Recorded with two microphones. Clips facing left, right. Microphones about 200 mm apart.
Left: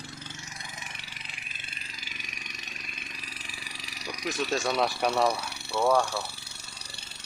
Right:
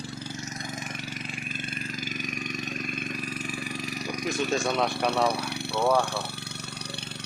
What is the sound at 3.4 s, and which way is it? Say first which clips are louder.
Vehicle: right 13 dB; 50° right (ahead or behind).